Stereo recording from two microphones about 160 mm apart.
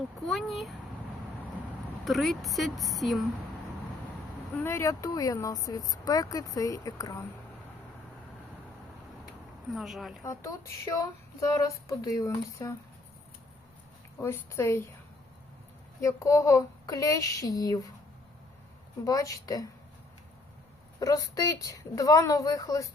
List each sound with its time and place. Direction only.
0.3 s a sound: centre (ahead or behind)
2.0 s a woman's voice: centre (ahead or behind)
4.6 s speech: 15° left (ahead or behind)
9.7 s a woman's voice: centre (ahead or behind)
10.2 s speech: 20° left (ahead or behind)
14.2 s speech: 15° left (ahead or behind)
16.0 s speech: 20° left (ahead or behind)
19.0 s speech: 20° left (ahead or behind)
21.0 s speech: 20° left (ahead or behind)